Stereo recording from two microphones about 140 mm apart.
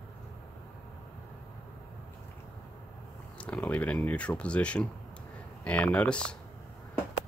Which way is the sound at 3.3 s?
10° left (ahead or behind).